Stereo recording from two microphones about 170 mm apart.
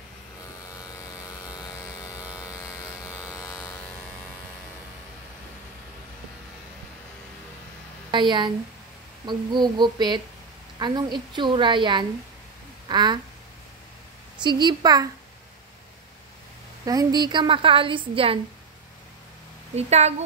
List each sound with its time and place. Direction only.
1.5 s a sound: 20° left (ahead or behind)
2.1 s electric shaver: 5° right (ahead or behind)
8.1 s a woman's voice: 25° right (ahead or behind)
14.4 s a woman's voice: 25° right (ahead or behind)
16.8 s a woman's voice: 20° right (ahead or behind)
19.7 s a woman's voice: 40° right (ahead or behind)